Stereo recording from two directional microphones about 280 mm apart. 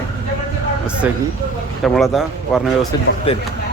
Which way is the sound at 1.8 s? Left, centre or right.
Centre.